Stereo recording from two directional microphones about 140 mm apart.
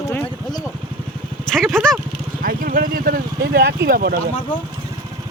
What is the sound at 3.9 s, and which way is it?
Speech, 90° right.